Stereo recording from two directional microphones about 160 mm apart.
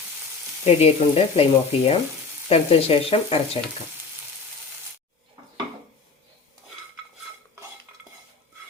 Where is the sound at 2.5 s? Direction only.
40° left (ahead or behind).